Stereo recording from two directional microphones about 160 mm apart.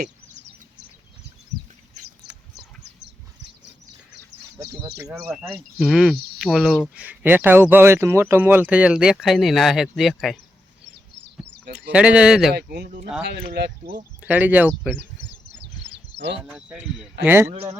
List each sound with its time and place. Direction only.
0.0 s bird: 90° right
4.8 s speech: 20° right (ahead or behind)
5.8 s speech: 5° right (ahead or behind)
11.7 s speech: 5° right (ahead or behind)
12.5 s speech: 90° right
14.2 s speech: 10° right (ahead or behind)
16.4 s speech: 5° right (ahead or behind)